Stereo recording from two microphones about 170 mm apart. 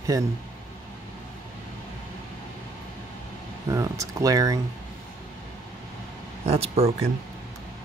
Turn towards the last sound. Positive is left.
turn(degrees=-35)  # may be behind; listen again after turning